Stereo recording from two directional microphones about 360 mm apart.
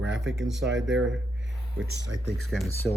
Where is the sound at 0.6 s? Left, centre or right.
Right.